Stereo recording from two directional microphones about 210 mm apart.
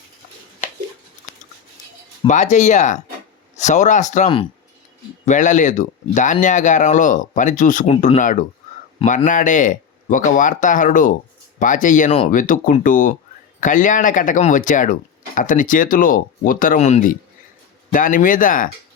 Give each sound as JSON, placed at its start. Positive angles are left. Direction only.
{"t": 2.2, "sound": "speech", "side_deg": 35}